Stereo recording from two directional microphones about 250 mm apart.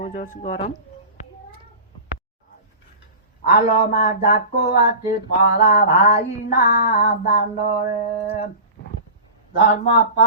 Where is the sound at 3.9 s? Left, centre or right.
Left.